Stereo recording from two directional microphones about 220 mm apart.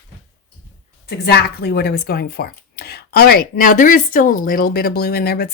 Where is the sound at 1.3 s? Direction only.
45° left (ahead or behind).